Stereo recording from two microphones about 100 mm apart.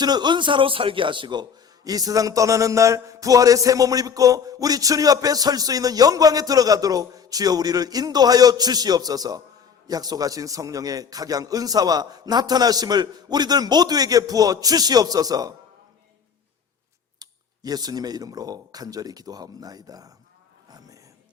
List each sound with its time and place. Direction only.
0.0 s a man's voice: 45° right (ahead or behind)
17.2 s a man's voice: 40° right (ahead or behind)
20.7 s a sound: 40° right (ahead or behind)